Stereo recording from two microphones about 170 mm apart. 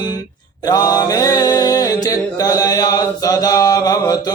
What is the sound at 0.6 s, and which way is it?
Mantra, 20° left (ahead or behind).